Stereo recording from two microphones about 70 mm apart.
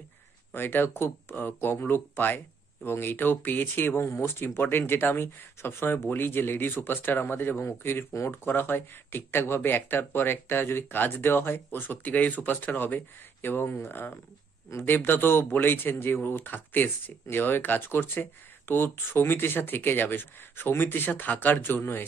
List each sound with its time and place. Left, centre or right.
0.5 s speech: left